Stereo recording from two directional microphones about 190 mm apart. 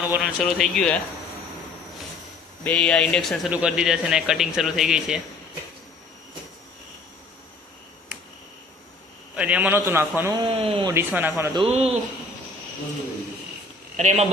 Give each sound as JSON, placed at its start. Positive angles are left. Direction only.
{"t": 0.2, "sound": "a man's voice", "side_deg": 0}
{"t": 2.6, "sound": "a man's voice", "side_deg": 5}
{"t": 9.3, "sound": "a man's voice", "side_deg": -5}
{"t": 10.4, "sound": "speech", "side_deg": -30}
{"t": 10.9, "sound": "a man's voice", "side_deg": -10}
{"t": 11.5, "sound": "a man's voice", "side_deg": -30}
{"t": 13.9, "sound": "speech", "side_deg": -35}